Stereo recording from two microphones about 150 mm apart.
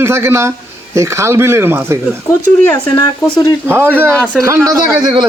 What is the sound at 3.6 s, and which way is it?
Speech, 15° right (ahead or behind).